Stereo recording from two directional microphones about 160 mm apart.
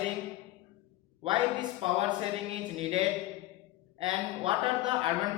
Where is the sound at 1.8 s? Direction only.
35° right (ahead or behind).